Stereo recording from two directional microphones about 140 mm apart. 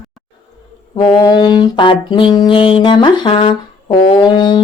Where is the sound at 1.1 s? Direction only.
30° left (ahead or behind).